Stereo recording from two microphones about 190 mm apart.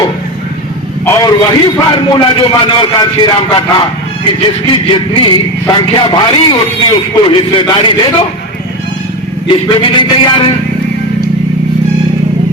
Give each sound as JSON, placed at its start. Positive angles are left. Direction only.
{"t": 1.0, "sound": "a man's voice", "side_deg": 15}
{"t": 9.5, "sound": "a man's voice", "side_deg": 25}